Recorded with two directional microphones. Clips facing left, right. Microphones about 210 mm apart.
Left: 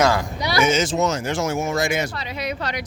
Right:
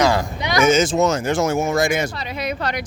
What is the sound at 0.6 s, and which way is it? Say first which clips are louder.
A woman's voice: right 6 dB; 50° right (ahead or behind).